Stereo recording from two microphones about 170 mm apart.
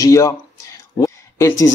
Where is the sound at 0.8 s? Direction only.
20° left (ahead or behind).